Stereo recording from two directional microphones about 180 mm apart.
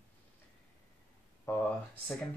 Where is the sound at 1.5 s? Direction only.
15° left (ahead or behind).